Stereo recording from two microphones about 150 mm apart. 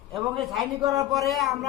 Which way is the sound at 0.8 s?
25° right (ahead or behind).